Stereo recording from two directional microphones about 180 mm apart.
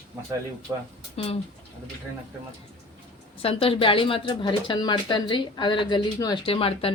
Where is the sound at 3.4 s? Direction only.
30° left (ahead or behind).